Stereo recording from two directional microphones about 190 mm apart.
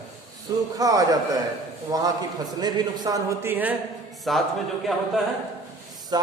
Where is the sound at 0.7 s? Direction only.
20° right (ahead or behind).